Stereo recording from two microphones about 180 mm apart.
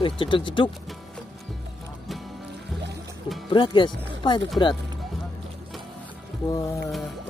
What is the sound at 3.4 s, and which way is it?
Speech, 30° left (ahead or behind).